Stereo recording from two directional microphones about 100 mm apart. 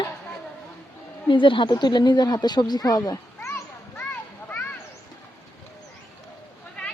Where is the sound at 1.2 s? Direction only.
55° left (ahead or behind); by 3.2 s 40° left (ahead or behind).